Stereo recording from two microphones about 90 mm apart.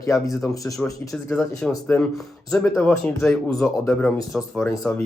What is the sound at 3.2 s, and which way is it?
Speech, 5° left (ahead or behind).